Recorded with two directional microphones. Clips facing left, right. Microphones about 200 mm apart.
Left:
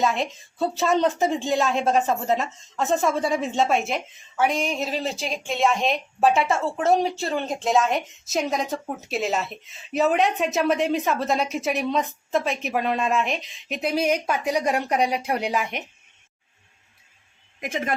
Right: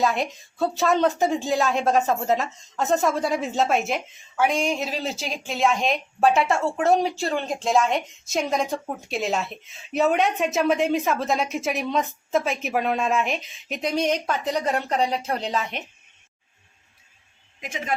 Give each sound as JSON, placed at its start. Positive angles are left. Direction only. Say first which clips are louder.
{"t": 0.0, "sound": "a woman's voice", "louder": "even", "side_deg": 0}
{"t": 17.6, "sound": "speech", "louder": "left 5 dB", "side_deg": 55}